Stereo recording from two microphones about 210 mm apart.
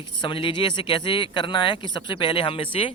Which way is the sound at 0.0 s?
20° left (ahead or behind).